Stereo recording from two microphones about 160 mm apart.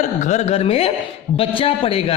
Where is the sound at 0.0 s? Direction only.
50° left (ahead or behind).